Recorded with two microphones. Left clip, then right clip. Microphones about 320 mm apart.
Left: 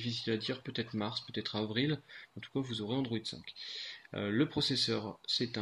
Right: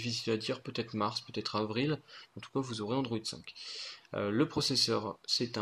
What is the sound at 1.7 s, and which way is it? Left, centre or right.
Speech, right.